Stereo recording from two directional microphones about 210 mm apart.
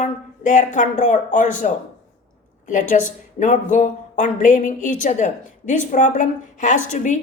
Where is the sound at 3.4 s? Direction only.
35° left (ahead or behind).